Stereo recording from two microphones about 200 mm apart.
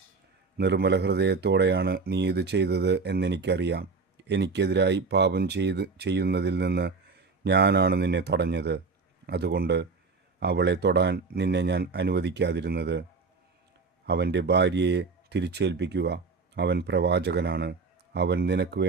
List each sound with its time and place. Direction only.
0.5 s speech: 55° right (ahead or behind)
14.1 s speech: 55° right (ahead or behind)